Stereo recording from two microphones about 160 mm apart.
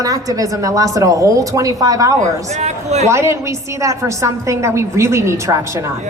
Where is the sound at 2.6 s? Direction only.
45° right (ahead or behind).